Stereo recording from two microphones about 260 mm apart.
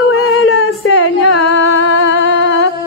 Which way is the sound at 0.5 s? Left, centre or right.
Left.